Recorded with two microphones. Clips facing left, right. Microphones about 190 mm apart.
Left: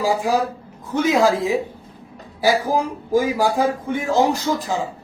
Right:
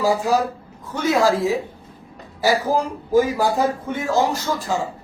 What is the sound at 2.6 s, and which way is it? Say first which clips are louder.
Speech: even; 10° left (ahead or behind).